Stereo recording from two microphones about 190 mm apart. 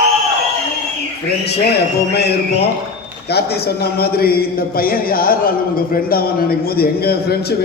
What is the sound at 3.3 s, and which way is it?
A man's voice, 60° left (ahead or behind).